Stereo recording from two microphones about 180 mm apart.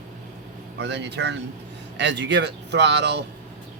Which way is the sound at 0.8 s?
75° right (ahead or behind).